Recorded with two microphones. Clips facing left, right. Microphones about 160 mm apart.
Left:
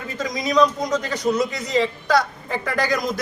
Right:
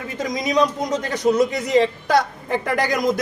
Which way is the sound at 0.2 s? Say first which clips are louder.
Left 1 dB; 25° right (ahead or behind).